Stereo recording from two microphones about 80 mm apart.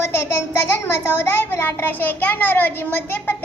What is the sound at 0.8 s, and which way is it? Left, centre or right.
A child's voice, left.